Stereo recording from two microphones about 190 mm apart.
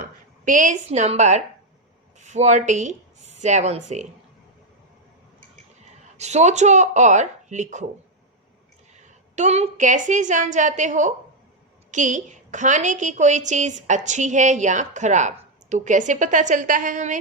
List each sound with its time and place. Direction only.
0.0 s speech: 45° right (ahead or behind)
6.1 s a woman's voice: 35° right (ahead or behind)
9.3 s a woman's voice: 35° right (ahead or behind)